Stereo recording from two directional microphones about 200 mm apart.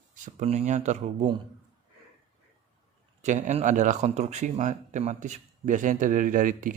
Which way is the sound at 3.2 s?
35° right (ahead or behind).